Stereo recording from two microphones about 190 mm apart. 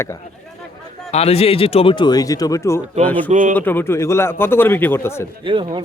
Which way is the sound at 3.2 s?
40° right (ahead or behind).